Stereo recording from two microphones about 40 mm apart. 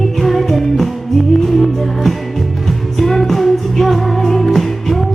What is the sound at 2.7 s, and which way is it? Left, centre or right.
Music, centre.